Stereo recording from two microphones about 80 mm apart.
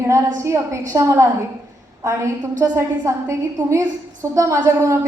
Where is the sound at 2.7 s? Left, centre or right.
Right.